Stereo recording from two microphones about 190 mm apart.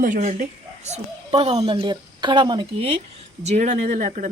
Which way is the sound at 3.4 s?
40° right (ahead or behind).